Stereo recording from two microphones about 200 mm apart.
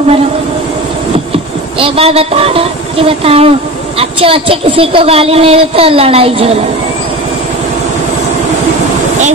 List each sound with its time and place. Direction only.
1.3 s a woman's voice: 30° right (ahead or behind)